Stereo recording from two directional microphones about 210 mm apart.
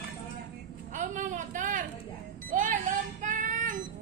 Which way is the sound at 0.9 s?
35° right (ahead or behind).